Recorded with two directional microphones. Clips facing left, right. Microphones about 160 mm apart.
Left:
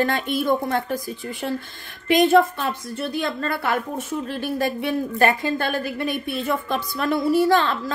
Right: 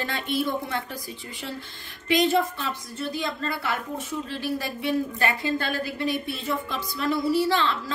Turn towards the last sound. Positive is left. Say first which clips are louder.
# left 5 dB
turn(degrees=50)  # may be behind; listen again after turning